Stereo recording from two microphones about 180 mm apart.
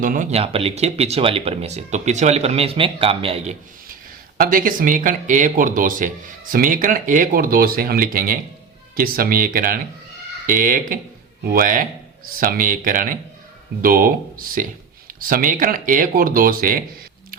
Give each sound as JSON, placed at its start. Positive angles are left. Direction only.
{"t": 0.0, "sound": "speech", "side_deg": -45}
{"t": 4.4, "sound": "speech", "side_deg": -50}